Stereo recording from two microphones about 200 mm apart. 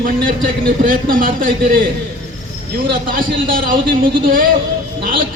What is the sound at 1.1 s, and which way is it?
Speech, 45° right (ahead or behind).